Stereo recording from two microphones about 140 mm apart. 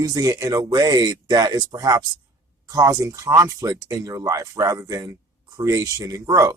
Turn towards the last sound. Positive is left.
turn(degrees=-20)  # may be behind; listen again after turning